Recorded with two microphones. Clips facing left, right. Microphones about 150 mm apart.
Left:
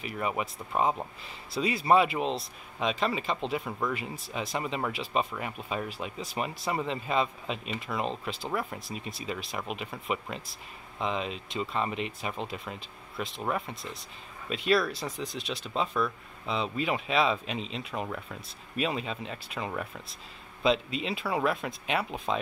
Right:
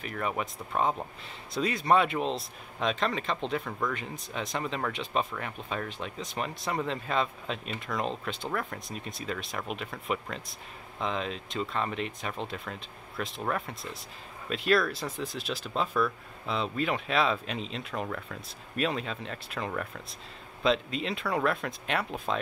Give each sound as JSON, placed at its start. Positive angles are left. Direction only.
{"t": 0.0, "sound": "speech", "side_deg": 5}